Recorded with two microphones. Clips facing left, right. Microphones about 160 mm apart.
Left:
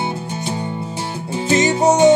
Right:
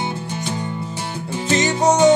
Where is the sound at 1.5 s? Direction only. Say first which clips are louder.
Left 2 dB; 30° left (ahead or behind).